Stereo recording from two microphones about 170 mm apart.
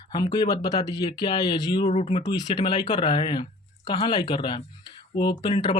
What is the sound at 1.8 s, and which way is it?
Speech, 40° left (ahead or behind).